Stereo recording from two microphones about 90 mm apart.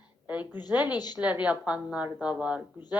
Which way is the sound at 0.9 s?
50° left (ahead or behind).